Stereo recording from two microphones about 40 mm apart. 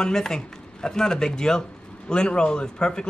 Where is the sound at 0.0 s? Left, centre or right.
Centre.